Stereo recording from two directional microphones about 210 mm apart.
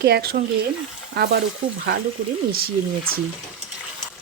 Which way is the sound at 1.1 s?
50° right (ahead or behind).